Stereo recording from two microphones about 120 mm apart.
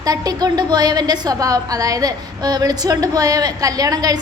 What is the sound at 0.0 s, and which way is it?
A woman's voice, 30° right (ahead or behind).